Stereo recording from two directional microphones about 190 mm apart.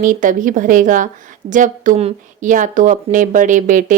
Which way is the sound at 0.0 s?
45° right (ahead or behind).